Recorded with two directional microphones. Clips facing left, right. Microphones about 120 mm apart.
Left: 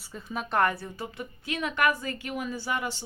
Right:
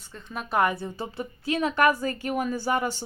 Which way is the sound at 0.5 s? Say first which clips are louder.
Right 2 dB; 15° right (ahead or behind).